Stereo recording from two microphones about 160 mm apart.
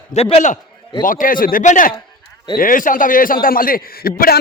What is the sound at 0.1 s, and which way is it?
Speech, 40° left (ahead or behind).